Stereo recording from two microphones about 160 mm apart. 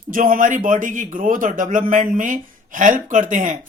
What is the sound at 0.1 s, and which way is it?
A man's voice, 60° right (ahead or behind).